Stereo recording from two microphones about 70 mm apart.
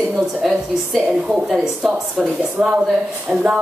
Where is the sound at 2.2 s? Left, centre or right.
Centre.